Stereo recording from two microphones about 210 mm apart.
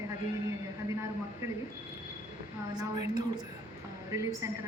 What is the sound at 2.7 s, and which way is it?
A woman's voice, 20° right (ahead or behind).